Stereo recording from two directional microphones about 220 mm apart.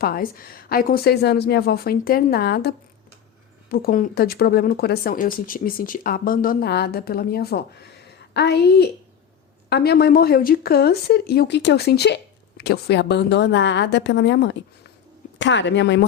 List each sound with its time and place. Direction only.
0.0 s a woman's voice: 40° left (ahead or behind)